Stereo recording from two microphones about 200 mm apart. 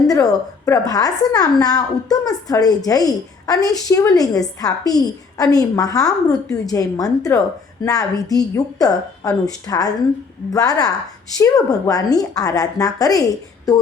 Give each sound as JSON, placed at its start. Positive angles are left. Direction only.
{"t": 0.1, "sound": "a woman's voice", "side_deg": 20}